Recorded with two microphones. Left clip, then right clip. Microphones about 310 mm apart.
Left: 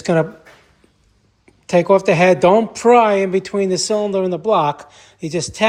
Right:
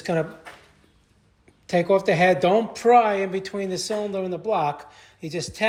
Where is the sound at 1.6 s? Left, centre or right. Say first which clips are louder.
Left 7 dB; centre.